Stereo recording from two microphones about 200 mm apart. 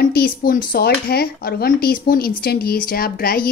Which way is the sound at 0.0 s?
50° left (ahead or behind).